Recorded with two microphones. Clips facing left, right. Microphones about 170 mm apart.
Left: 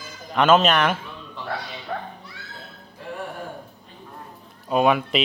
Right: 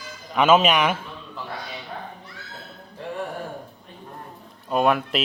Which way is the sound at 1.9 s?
90° left.